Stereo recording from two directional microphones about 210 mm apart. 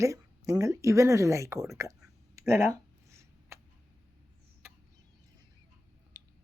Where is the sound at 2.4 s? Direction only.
10° right (ahead or behind).